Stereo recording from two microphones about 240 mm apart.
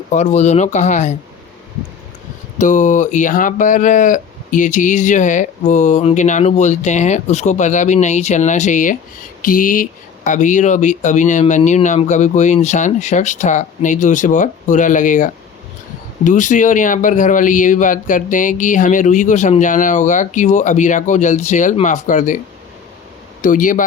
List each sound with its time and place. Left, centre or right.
0.1 s speech: left
2.6 s speech: left
23.4 s speech: left